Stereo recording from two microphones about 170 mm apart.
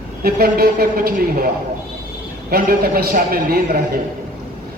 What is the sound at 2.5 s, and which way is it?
A man's voice, 60° right (ahead or behind).